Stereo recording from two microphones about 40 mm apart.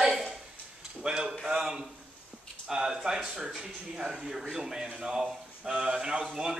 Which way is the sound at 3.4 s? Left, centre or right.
Centre.